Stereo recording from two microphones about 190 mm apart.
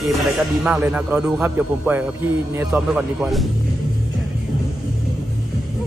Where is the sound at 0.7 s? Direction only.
5° right (ahead or behind).